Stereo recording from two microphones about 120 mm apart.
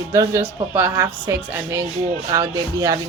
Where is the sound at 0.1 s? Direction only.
25° right (ahead or behind).